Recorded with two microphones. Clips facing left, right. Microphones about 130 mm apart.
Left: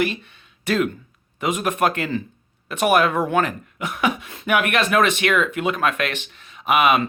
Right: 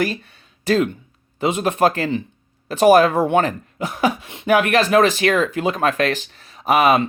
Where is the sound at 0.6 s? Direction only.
30° right (ahead or behind).